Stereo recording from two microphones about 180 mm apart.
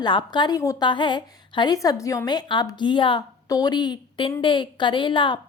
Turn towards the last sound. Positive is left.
turn(degrees=25)  # may be behind; listen again after turning